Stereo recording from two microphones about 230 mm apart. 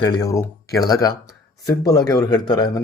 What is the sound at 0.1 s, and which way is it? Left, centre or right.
Speech, centre.